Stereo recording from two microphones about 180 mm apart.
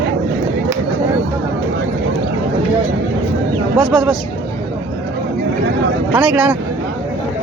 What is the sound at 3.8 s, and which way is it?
Speech, centre (ahead or behind).